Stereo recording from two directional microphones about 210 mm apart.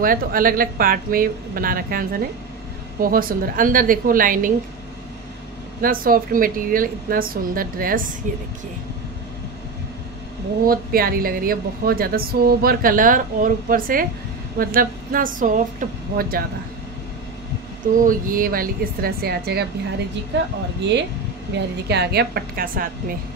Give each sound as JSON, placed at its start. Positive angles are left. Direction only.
{"t": 0.0, "sound": "a woman's voice", "side_deg": -40}
{"t": 5.8, "sound": "a woman's voice", "side_deg": -45}
{"t": 10.7, "sound": "a woman's voice", "side_deg": -45}
{"t": 17.9, "sound": "a woman's voice", "side_deg": -40}
{"t": 21.5, "sound": "a woman's voice", "side_deg": -55}